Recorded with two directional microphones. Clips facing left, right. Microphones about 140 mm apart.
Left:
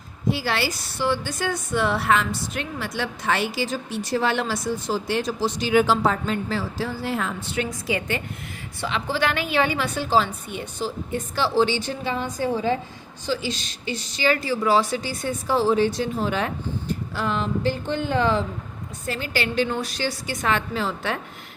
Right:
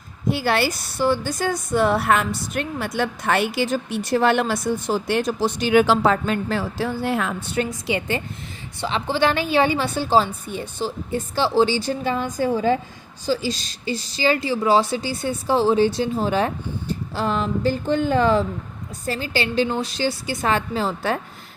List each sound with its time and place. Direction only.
0.3 s a woman's voice: 55° right (ahead or behind)
7.9 s a woman's voice: 30° right (ahead or behind)